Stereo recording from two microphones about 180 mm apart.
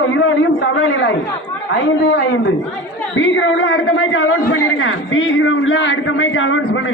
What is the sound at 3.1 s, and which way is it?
A man's voice, 90° left.